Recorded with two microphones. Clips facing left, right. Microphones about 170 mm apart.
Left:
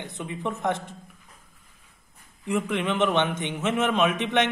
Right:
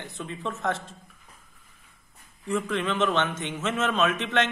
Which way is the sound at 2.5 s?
15° left (ahead or behind).